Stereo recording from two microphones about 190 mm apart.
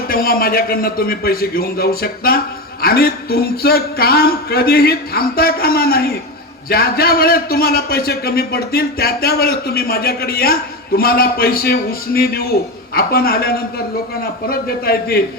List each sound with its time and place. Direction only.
0.1 s a man's voice: 50° left (ahead or behind)